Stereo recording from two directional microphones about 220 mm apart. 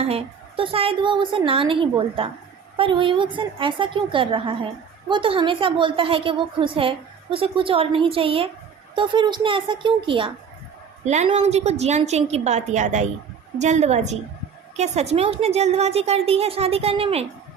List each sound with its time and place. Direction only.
0.0 s a woman's voice: 25° right (ahead or behind)